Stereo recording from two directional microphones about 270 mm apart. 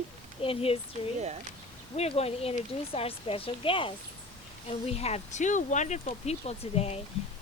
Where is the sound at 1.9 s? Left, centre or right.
Left.